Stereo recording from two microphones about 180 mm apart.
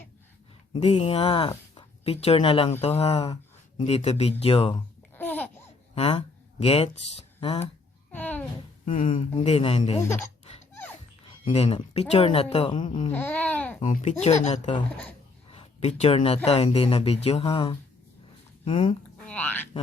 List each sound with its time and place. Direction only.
0.7 s speech: 30° left (ahead or behind)
5.1 s babbling: 10° left (ahead or behind)
5.9 s speech: 35° left (ahead or behind)
8.1 s a sound: 10° left (ahead or behind)
8.8 s speech: 45° left (ahead or behind)
9.3 s speech: 35° left (ahead or behind)
10.0 s speech: 15° left (ahead or behind)
11.4 s speech: 35° left (ahead or behind)
13.1 s speech: 10° left (ahead or behind)
13.8 s speech: 40° left (ahead or behind)
19.2 s speech: 10° left (ahead or behind)